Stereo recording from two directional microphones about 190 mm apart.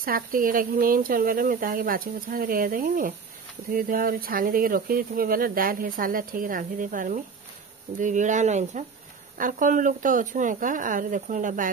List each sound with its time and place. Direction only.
0.0 s speech: 50° right (ahead or behind)